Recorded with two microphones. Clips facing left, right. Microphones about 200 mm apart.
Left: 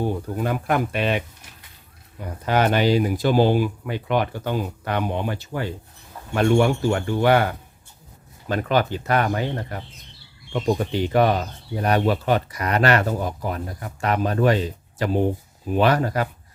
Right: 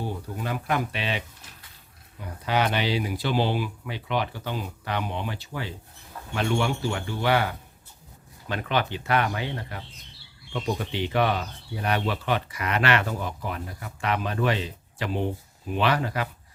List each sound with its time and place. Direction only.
0.0 s speech: 50° left (ahead or behind)
2.2 s speech: 45° left (ahead or behind)